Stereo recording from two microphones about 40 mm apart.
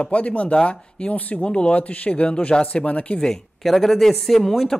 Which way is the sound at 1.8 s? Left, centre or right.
Left.